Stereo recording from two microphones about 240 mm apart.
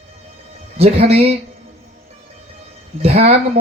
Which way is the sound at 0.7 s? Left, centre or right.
Right.